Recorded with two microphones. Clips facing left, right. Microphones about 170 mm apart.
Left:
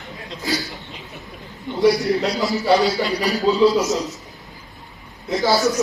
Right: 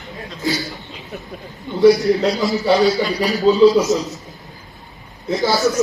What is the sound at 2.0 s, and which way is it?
Speech, centre (ahead or behind).